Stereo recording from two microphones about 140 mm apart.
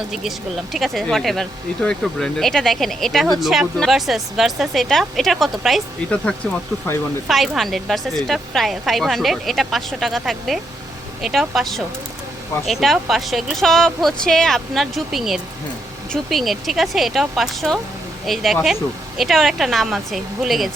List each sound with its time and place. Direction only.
0.1 s speech: centre (ahead or behind)